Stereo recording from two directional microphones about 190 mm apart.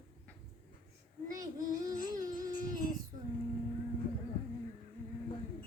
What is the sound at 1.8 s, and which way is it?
Carnatic music, 20° right (ahead or behind).